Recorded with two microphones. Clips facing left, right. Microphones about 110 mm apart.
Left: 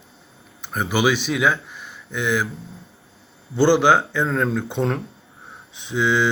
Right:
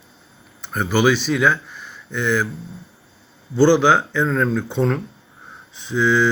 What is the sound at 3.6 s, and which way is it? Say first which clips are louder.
Speech: right 1 dB; 15° left (ahead or behind).